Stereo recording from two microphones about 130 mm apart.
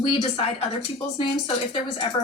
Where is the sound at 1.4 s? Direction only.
45° left (ahead or behind).